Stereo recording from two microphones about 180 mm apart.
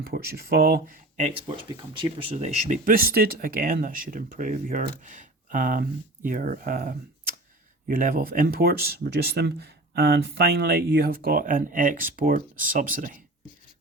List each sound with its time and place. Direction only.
0.0 s speech: 60° right (ahead or behind)
1.1 s speech: 30° right (ahead or behind)
2.3 s speech: 40° right (ahead or behind)